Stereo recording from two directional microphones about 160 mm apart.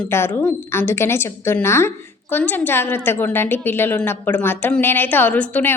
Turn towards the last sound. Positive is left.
turn(degrees=10)  # may be behind; listen again after turning